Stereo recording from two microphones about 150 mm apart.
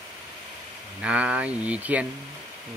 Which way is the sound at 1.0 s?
10° right (ahead or behind).